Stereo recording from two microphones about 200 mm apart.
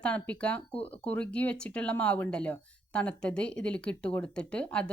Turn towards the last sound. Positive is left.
turn(degrees=5)  # may be behind; listen again after turning